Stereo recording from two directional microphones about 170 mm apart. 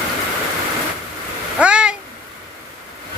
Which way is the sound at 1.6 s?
5° right (ahead or behind).